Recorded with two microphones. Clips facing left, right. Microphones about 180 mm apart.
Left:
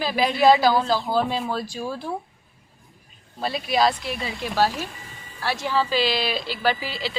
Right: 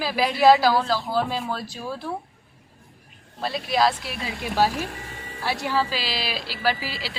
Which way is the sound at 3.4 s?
Centre (ahead or behind).